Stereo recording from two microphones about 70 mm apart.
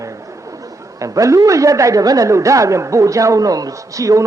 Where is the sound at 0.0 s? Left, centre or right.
Right.